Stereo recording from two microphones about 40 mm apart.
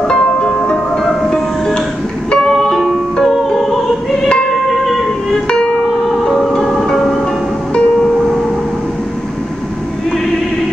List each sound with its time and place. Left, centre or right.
0.1 s music: centre
5.5 s music: left
6.2 s music: centre